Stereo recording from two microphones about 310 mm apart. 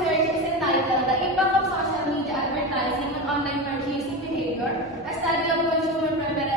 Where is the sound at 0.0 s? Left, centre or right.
Centre.